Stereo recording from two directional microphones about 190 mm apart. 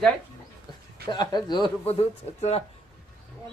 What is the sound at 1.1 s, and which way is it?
Speech, 20° left (ahead or behind).